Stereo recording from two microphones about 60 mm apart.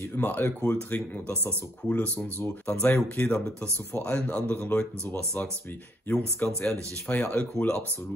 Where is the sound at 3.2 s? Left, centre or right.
Centre.